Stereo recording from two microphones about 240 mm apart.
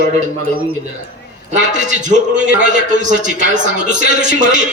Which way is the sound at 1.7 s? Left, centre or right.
Right.